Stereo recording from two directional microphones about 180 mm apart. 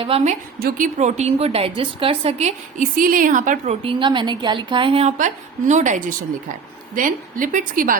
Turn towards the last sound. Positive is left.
turn(degrees=-50)  # may be behind; listen again after turning